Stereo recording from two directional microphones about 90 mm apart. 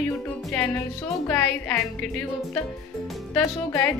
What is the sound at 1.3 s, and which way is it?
A woman's voice, 10° left (ahead or behind).